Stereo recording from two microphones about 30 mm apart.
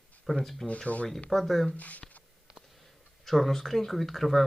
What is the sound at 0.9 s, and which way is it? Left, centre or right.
Speech, left.